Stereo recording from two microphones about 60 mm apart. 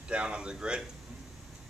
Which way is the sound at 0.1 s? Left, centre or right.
Centre.